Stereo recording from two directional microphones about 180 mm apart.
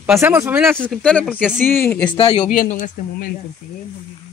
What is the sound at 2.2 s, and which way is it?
Speech, 30° left (ahead or behind).